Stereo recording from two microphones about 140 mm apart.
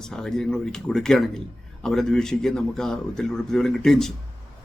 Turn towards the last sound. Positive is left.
turn(degrees=0)  # may be behind; listen again after turning